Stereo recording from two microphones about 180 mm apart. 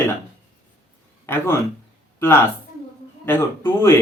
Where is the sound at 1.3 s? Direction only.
10° left (ahead or behind).